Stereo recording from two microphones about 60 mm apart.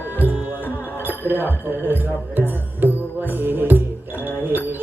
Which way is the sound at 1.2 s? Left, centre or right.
Right.